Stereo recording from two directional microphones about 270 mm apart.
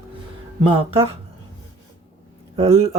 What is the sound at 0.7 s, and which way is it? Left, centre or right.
Speech, right.